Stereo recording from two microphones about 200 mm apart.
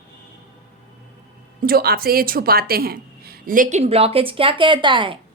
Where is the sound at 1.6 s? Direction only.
50° right (ahead or behind).